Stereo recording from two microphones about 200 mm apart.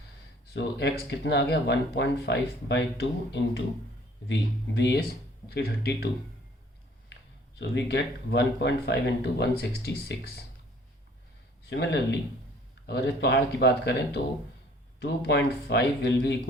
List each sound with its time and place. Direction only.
0.5 s speech: 60° left (ahead or behind)
4.8 s speech: 55° left (ahead or behind)
7.6 s speech: 55° left (ahead or behind)
11.7 s speech: 60° left (ahead or behind)